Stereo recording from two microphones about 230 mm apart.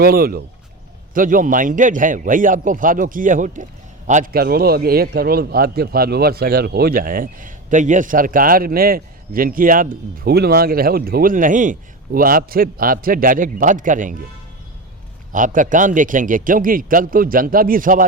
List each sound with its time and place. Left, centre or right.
0.0 s a man's voice: right
15.3 s a man's voice: right